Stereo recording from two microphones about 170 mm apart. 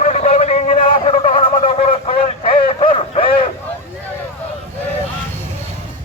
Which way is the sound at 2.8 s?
35° left (ahead or behind).